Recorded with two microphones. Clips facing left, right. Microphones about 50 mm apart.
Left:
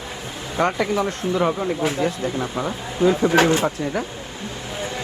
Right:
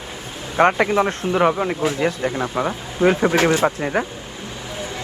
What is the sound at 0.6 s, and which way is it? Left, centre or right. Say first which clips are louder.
Speech: right 5 dB; right.